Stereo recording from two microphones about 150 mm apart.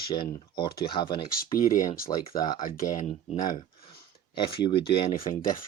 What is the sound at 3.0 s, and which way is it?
Speech, 55° left (ahead or behind).